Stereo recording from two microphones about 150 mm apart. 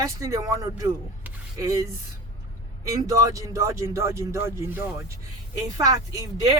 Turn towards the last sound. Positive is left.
turn(degrees=-25)  # may be behind; listen again after turning